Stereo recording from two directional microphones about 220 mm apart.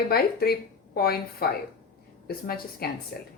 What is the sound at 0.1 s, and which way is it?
Speech, 45° left (ahead or behind).